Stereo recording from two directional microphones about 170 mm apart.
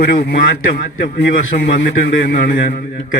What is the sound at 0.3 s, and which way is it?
Speech, 55° left (ahead or behind).